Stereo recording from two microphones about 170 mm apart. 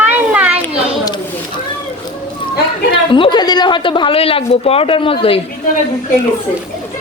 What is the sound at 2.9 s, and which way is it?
Speech, 30° left (ahead or behind).